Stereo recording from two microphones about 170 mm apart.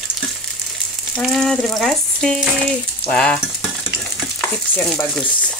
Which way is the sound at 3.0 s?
5° left (ahead or behind).